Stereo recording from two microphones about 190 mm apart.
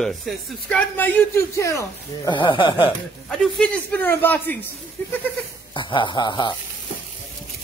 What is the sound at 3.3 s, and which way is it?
A man's voice, 5° left (ahead or behind).